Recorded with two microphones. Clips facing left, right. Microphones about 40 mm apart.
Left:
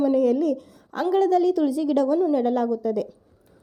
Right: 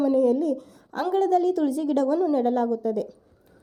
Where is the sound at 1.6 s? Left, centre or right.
Left.